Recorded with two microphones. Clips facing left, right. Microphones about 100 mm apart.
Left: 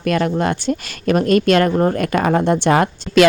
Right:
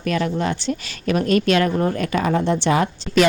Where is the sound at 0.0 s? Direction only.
50° left (ahead or behind).